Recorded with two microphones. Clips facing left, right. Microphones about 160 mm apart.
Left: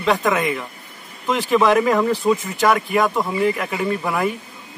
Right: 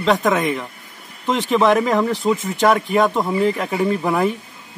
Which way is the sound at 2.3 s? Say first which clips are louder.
Left 1 dB; 25° right (ahead or behind).